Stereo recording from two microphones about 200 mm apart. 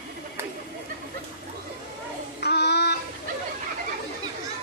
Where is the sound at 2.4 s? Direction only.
55° left (ahead or behind).